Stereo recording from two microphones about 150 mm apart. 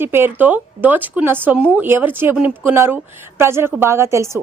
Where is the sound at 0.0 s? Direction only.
15° right (ahead or behind).